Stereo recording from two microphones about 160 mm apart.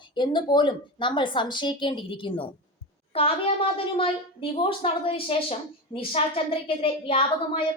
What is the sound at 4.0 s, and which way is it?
A woman's voice, 35° left (ahead or behind).